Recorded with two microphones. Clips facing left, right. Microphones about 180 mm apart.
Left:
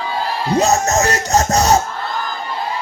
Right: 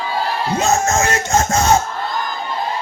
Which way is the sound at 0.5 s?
35° left (ahead or behind).